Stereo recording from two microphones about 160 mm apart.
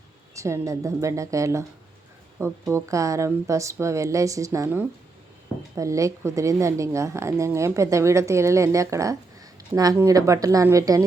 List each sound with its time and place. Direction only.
0.3 s a woman's voice: 20° right (ahead or behind)